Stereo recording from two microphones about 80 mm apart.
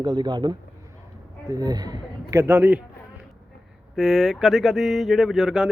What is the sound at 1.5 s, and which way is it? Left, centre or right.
Speech, right.